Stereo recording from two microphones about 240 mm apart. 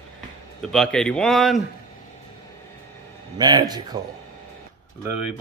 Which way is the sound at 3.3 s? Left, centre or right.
Centre.